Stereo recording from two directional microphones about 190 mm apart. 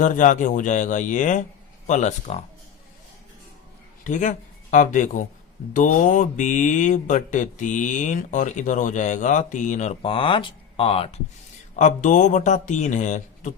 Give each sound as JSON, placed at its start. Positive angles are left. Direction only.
{"t": 0.0, "sound": "speech", "side_deg": 40}
{"t": 4.0, "sound": "speech", "side_deg": 40}
{"t": 11.8, "sound": "speech", "side_deg": 40}